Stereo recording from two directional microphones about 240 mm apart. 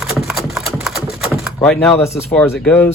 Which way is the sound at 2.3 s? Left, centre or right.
Centre.